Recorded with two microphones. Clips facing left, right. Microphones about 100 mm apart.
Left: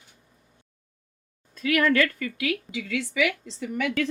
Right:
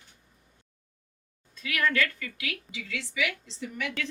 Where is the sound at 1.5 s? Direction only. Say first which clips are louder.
Left 7 dB; 55° left (ahead or behind).